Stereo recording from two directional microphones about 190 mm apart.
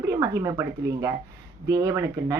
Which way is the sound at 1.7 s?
20° right (ahead or behind).